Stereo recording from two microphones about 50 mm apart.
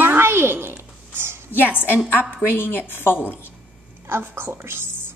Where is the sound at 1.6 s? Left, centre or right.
Left.